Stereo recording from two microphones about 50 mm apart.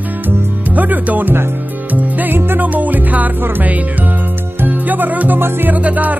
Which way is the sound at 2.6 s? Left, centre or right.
Right.